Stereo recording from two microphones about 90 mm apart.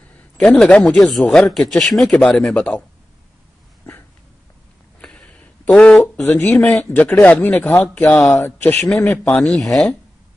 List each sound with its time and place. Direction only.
0.4 s speech: 10° left (ahead or behind)
5.0 s a sound: 5° left (ahead or behind)
5.7 s speech: 15° left (ahead or behind)
9.4 s speech: 5° left (ahead or behind)